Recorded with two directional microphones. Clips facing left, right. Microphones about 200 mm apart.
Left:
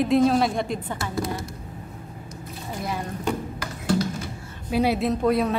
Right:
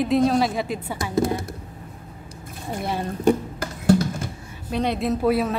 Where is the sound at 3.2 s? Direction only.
50° right (ahead or behind).